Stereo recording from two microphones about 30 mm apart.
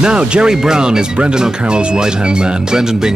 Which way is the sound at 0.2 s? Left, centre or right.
Right.